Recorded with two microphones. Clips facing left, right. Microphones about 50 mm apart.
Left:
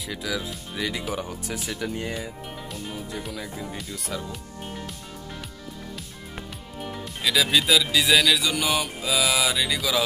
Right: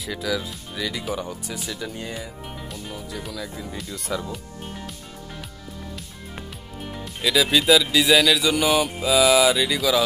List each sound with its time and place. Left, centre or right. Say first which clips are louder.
0.0 s speech: right 3 dB; centre
0.7 s speech: even; left
1.3 s speech: even; left
2.9 s speech: even; centre
6.9 s speech: right 2 dB; centre